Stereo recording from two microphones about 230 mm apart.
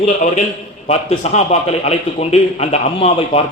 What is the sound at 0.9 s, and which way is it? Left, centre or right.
A man's voice, left.